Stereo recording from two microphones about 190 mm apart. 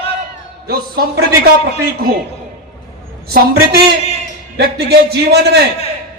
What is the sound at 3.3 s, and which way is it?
A man's voice, 55° right (ahead or behind).